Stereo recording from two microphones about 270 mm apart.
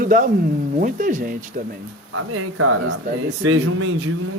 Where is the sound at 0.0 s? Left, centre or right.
Right.